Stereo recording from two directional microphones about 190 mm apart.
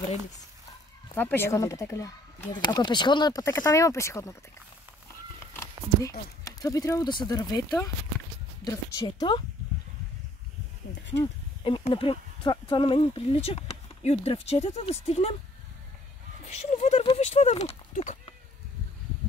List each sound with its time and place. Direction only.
1.1 s speech: 10° left (ahead or behind)
5.5 s speech: 15° left (ahead or behind)
11.6 s speech: 25° left (ahead or behind)
16.4 s speech: 35° left (ahead or behind)